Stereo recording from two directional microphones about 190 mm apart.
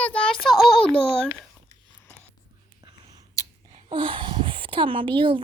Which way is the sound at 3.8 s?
25° right (ahead or behind).